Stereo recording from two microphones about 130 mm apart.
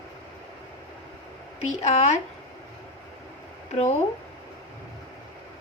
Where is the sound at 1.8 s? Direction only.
60° left (ahead or behind).